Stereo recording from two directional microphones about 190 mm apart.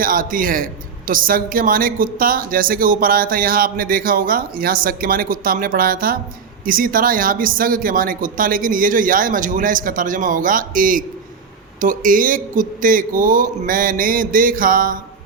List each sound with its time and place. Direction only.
0.0 s a woman's voice: 45° right (ahead or behind)